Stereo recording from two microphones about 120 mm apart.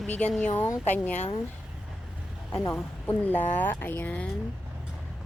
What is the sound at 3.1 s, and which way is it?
Speech, 15° left (ahead or behind).